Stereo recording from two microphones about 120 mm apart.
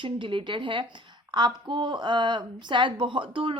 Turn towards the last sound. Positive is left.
turn(degrees=-45)  # may be behind; listen again after turning